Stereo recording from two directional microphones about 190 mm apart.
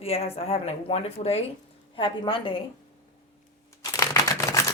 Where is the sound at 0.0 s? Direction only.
30° left (ahead or behind).